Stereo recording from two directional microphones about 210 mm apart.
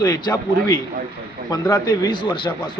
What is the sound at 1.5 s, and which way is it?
A man's voice, 20° left (ahead or behind).